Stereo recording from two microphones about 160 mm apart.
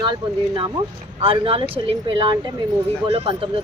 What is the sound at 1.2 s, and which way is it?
A woman's voice, 35° right (ahead or behind).